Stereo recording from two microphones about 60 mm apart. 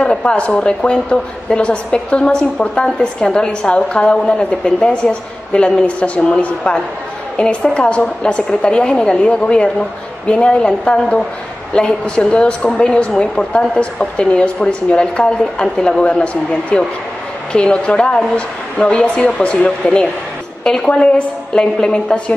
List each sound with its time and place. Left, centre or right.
0.0 s a woman's voice: centre